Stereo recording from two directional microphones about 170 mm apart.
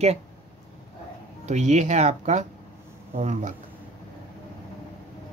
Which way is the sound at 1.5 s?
45° right (ahead or behind).